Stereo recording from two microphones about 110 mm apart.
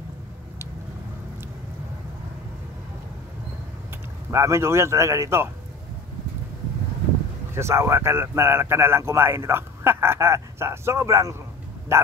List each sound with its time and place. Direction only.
4.3 s speech: 25° right (ahead or behind)
7.5 s speech: 25° right (ahead or behind)